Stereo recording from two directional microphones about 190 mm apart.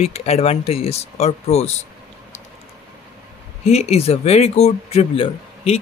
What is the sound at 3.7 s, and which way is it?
Speech, 35° left (ahead or behind).